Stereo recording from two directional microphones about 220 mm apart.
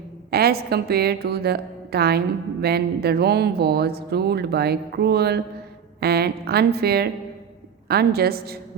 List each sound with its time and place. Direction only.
0.3 s a woman's voice: 45° right (ahead or behind)